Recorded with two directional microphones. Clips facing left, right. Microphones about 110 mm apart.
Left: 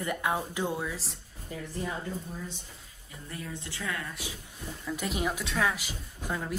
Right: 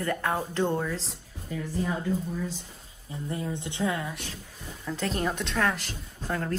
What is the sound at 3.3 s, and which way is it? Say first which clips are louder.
Speech: right 6 dB; 20° right (ahead or behind).